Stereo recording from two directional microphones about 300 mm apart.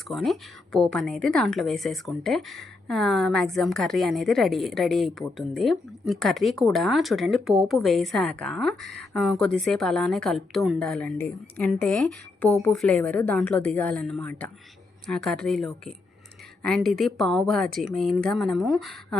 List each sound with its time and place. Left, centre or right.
0.1 s a woman's voice: centre